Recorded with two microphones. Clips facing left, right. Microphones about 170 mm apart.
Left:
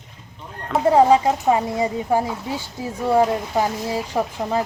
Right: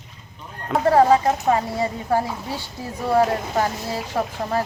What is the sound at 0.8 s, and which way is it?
Speech, 20° left (ahead or behind).